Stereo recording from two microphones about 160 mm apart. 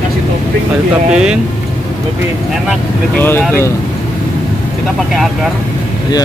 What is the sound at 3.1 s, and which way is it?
Speech, 15° left (ahead or behind).